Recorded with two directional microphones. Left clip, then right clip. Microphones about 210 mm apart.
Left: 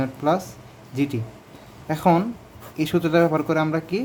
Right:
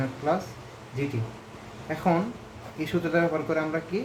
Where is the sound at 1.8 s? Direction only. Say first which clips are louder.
Left 6 dB; 40° left (ahead or behind).